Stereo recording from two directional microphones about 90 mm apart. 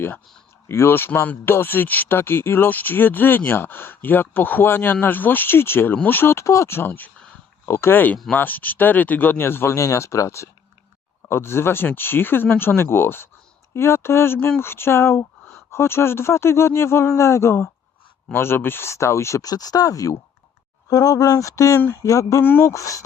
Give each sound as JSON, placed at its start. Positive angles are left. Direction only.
{"t": 0.7, "sound": "speech", "side_deg": 30}